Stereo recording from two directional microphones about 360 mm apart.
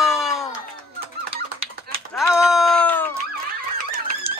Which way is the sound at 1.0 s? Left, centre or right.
Right.